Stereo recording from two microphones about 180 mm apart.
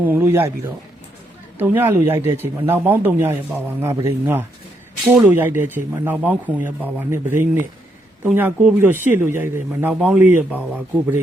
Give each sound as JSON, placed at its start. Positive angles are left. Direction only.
{"t": 0.0, "sound": "speech", "side_deg": -10}
{"t": 1.5, "sound": "speech", "side_deg": -10}